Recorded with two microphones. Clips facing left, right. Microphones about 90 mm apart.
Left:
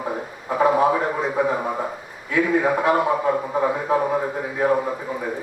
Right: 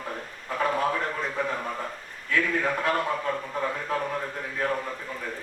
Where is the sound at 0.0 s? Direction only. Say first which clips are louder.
Left 8 dB; 20° left (ahead or behind).